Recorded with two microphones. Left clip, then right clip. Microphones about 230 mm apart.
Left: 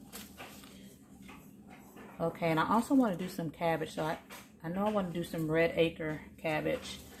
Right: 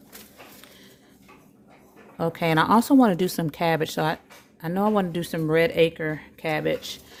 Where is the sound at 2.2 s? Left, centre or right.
Right.